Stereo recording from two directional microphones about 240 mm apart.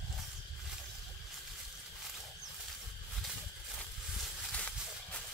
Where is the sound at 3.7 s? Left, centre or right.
Centre.